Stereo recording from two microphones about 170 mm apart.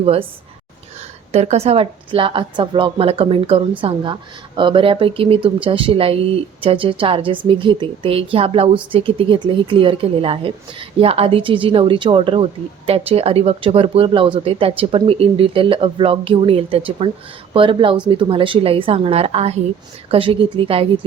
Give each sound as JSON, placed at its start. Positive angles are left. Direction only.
{"t": 0.0, "sound": "a woman's voice", "side_deg": -35}
{"t": 1.3, "sound": "a woman's voice", "side_deg": -40}